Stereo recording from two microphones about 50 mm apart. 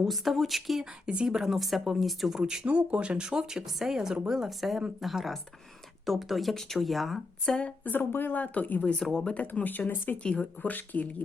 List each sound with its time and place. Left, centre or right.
0.0 s speech: centre
1.0 s speech: centre
2.4 s speech: centre
7.4 s speech: centre
7.9 s speech: left
9.1 s speech: centre
9.4 s speech: left